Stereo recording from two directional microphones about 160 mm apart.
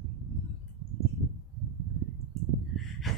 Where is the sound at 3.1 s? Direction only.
Centre (ahead or behind).